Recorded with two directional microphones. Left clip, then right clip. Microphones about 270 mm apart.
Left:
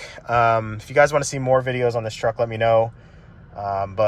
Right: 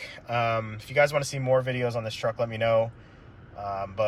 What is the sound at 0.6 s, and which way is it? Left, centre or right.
Speech, left.